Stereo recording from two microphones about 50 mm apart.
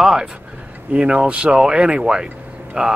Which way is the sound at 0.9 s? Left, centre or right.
Right.